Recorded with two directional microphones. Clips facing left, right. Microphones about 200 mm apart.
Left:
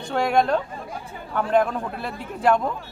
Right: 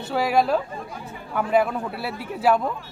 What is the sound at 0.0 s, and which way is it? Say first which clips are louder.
A man's voice: even; 5° right (ahead or behind).